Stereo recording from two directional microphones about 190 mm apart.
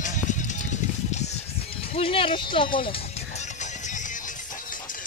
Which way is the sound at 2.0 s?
30° left (ahead or behind).